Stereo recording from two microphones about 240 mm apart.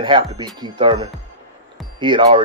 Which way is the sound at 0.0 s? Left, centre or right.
Centre.